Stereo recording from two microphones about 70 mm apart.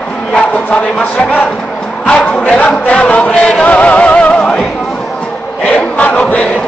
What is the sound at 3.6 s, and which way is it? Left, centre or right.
Music, left.